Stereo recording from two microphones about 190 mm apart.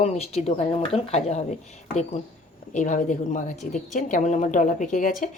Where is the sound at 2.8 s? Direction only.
40° left (ahead or behind).